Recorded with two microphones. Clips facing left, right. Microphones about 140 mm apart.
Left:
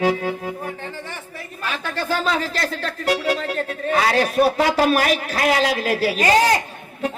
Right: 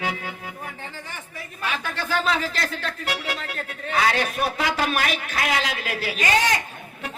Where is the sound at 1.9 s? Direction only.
35° left (ahead or behind).